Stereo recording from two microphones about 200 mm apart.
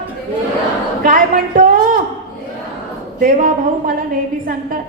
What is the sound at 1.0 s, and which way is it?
A man's voice, 45° right (ahead or behind).